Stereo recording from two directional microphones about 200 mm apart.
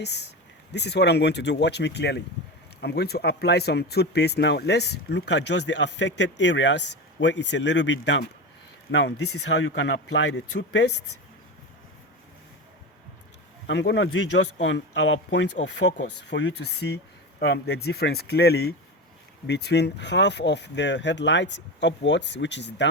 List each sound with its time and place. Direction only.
0.0 s speech: 55° left (ahead or behind)
13.7 s speech: 60° left (ahead or behind)